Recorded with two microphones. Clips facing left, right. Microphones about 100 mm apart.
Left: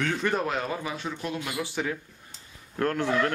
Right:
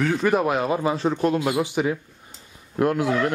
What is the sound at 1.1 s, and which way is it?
Speech, 50° right (ahead or behind).